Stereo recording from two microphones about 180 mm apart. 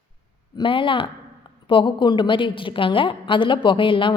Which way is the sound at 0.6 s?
30° left (ahead or behind).